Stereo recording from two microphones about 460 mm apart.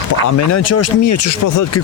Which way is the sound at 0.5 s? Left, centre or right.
Left.